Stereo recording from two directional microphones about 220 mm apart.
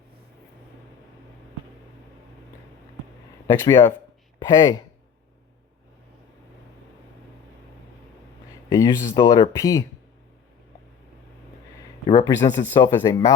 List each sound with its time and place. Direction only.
3.4 s speech: 10° left (ahead or behind)
8.7 s speech: 15° left (ahead or behind)
12.2 s speech: 15° left (ahead or behind)